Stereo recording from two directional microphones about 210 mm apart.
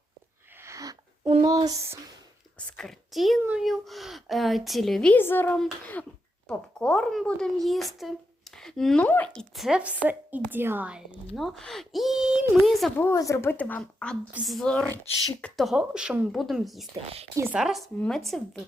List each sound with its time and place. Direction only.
0.5 s a sound: 15° right (ahead or behind)
1.3 s speech: 20° right (ahead or behind)
2.7 s a woman's voice: centre (ahead or behind)
13.0 s a woman's voice: 15° left (ahead or behind)